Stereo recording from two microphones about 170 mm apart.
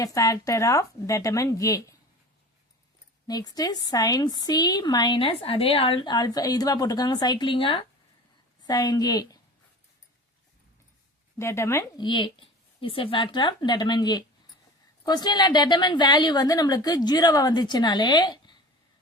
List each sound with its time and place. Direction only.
0.0 s speech: 20° left (ahead or behind)
3.2 s speech: 25° left (ahead or behind)
11.3 s speech: 15° left (ahead or behind)
12.0 s speech: 30° left (ahead or behind)